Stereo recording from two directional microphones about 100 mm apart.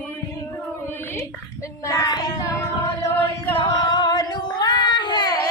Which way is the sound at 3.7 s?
45° left (ahead or behind).